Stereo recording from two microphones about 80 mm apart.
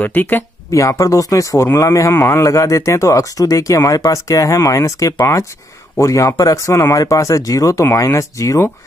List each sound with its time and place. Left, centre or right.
0.0 s speech: left
0.7 s speech: left